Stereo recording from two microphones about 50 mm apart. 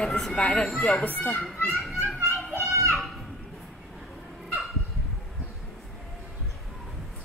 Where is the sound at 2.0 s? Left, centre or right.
Right.